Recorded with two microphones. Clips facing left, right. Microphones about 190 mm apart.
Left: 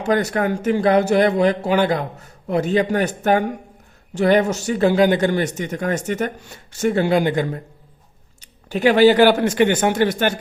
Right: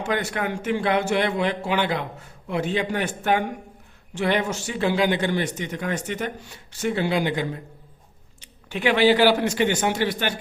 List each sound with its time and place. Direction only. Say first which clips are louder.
0.0 s a man's voice: left 7 dB; 40° left (ahead or behind)